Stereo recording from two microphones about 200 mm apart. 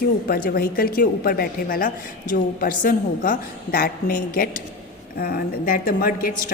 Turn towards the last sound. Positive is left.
turn(degrees=45)  # may be behind; listen again after turning